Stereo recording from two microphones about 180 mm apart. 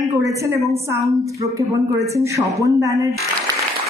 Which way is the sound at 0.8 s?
15° right (ahead or behind).